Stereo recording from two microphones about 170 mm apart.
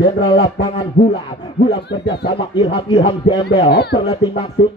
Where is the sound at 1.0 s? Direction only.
65° left (ahead or behind).